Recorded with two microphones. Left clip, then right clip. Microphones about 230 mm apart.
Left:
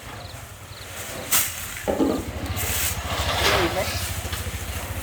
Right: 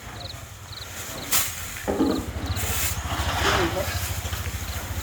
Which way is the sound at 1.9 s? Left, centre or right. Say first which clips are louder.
Left 2 dB; left.